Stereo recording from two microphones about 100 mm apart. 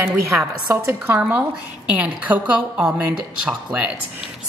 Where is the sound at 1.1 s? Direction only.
15° right (ahead or behind).